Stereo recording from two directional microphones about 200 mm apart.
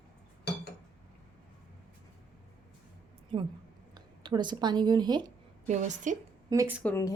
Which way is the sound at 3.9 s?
20° right (ahead or behind).